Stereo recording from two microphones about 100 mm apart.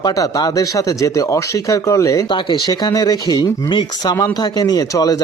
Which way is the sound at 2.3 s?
50° left (ahead or behind).